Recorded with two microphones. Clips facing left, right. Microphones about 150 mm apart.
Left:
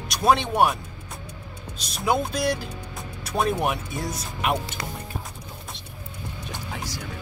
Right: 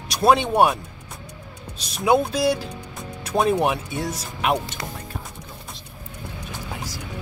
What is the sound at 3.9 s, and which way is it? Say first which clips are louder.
Speech: right 3 dB; centre (ahead or behind).